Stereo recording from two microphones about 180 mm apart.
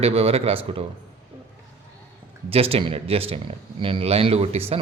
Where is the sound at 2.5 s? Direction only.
30° right (ahead or behind).